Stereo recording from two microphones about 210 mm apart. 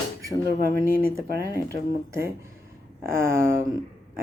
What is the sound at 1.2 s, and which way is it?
Speech, 50° right (ahead or behind).